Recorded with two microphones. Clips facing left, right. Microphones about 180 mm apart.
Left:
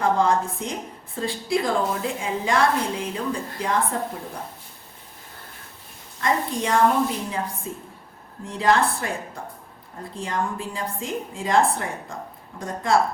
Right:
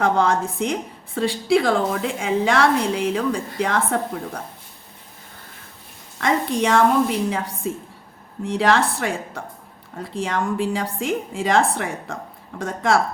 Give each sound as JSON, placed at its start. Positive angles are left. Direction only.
{"t": 0.0, "sound": "a woman's voice", "side_deg": -75}
{"t": 6.1, "sound": "a woman's voice", "side_deg": -75}